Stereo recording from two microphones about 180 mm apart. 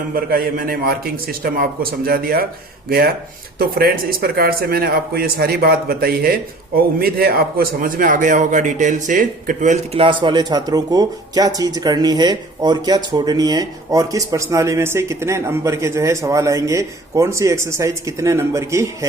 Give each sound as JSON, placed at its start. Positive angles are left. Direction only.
{"t": 0.3, "sound": "a man's voice", "side_deg": -55}